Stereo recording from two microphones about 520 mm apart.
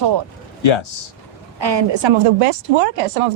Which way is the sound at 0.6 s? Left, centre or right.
Left.